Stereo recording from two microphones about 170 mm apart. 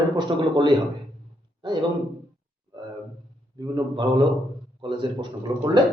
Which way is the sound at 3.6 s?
20° right (ahead or behind).